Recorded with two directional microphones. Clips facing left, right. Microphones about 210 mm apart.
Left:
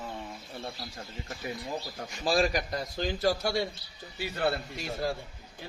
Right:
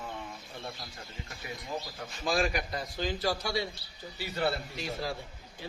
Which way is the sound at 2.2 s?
35° left (ahead or behind).